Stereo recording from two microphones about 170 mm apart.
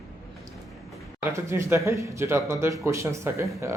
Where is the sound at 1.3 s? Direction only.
15° right (ahead or behind).